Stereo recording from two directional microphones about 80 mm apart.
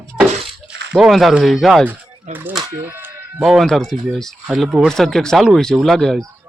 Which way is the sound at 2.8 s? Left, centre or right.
Right.